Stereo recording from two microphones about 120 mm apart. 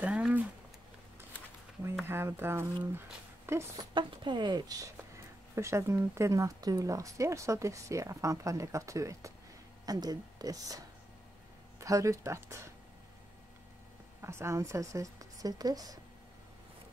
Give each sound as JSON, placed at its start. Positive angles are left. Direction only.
{"t": 0.0, "sound": "a sound", "side_deg": -10}
{"t": 2.0, "sound": "speech", "side_deg": -20}
{"t": 3.9, "sound": "speech", "side_deg": -40}
{"t": 11.8, "sound": "speech", "side_deg": -25}
{"t": 14.2, "sound": "speech", "side_deg": -20}